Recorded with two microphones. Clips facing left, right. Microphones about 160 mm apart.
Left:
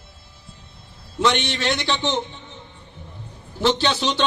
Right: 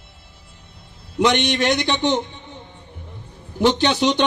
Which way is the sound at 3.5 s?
15° right (ahead or behind).